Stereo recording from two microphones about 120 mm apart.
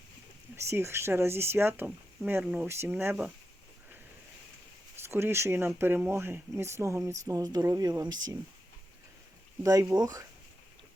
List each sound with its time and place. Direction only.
0.5 s speech: 20° right (ahead or behind)
5.0 s speech: 20° right (ahead or behind)
9.9 s speech: 30° right (ahead or behind)